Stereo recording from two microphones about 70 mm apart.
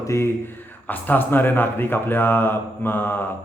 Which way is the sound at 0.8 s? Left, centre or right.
Left.